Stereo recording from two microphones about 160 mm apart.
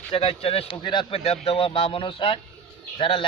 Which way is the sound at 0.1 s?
35° left (ahead or behind).